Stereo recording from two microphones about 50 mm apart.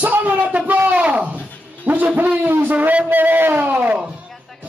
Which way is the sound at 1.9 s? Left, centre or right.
Right.